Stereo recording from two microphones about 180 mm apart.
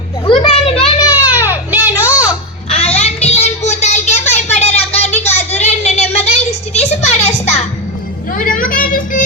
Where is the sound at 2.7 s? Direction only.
35° left (ahead or behind).